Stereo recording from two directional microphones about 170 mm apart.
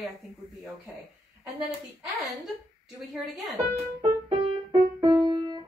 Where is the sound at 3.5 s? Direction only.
35° right (ahead or behind).